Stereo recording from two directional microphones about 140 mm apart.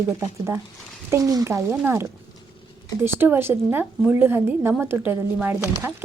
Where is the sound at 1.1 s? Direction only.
25° right (ahead or behind).